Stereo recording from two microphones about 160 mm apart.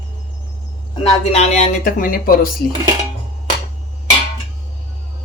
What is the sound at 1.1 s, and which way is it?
Speech, 40° left (ahead or behind).